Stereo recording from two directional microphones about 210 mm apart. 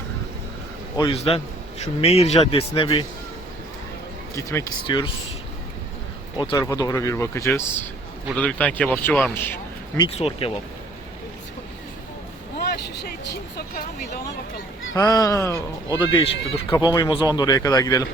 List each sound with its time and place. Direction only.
0.9 s speech: 25° left (ahead or behind)
4.4 s speech: 15° left (ahead or behind)
6.4 s speech: 15° left (ahead or behind)
10.0 s speech: 30° left (ahead or behind)
12.5 s vehicle: 50° left (ahead or behind)
14.9 s speech: 15° left (ahead or behind)
16.0 s speech: 25° left (ahead or behind)